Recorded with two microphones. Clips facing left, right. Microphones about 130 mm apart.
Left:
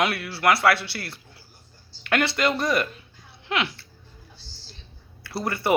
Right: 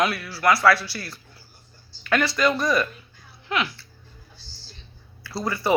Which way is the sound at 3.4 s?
25° left (ahead or behind).